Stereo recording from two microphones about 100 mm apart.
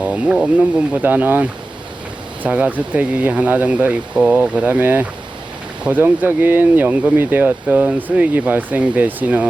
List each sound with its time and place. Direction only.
0.0 s speech: 10° right (ahead or behind)